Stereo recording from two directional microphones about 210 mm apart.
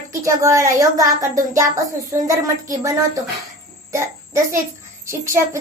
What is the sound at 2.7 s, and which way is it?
A child's voice, 15° right (ahead or behind).